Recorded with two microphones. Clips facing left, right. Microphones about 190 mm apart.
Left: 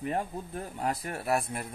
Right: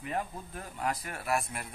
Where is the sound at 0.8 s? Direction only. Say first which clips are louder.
Left 1 dB; 30° left (ahead or behind).